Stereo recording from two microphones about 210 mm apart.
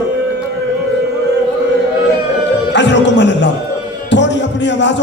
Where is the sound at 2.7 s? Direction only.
60° left (ahead or behind).